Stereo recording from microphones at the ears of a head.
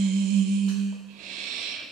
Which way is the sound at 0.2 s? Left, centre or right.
Right.